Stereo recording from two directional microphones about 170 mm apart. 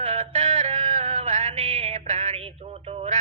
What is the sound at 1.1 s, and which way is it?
Music, 45° right (ahead or behind).